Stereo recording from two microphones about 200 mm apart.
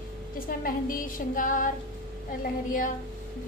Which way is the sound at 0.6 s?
45° left (ahead or behind).